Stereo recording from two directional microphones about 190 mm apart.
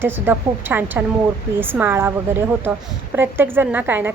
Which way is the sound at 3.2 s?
10° right (ahead or behind).